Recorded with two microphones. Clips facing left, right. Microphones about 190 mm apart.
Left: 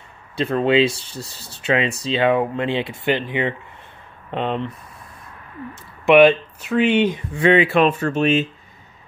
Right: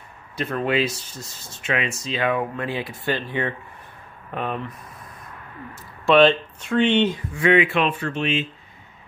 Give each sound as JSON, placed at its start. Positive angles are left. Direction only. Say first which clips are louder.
{"t": 0.4, "sound": "speech", "louder": "left 6 dB", "side_deg": 30}
{"t": 6.0, "sound": "speech", "louder": "left 4 dB", "side_deg": 15}
{"t": 7.3, "sound": "speech", "louder": "left 3 dB", "side_deg": 30}